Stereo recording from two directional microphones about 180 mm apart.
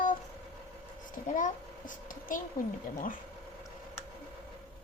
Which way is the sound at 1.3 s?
45° left (ahead or behind).